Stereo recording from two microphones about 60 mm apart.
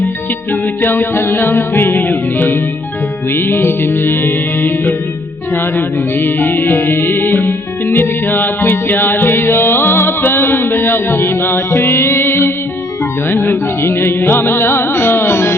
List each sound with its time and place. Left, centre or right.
0.8 s mantra: left